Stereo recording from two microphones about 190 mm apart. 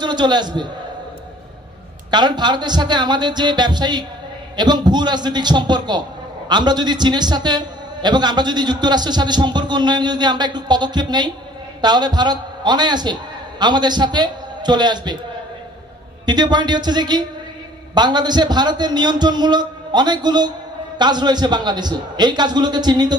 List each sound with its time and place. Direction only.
0.0 s a man's voice: 20° right (ahead or behind)
2.0 s a man's voice: 20° right (ahead or behind)
16.3 s a man's voice: 20° right (ahead or behind)